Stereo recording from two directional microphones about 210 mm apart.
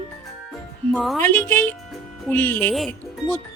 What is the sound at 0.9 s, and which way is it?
Speech, centre (ahead or behind).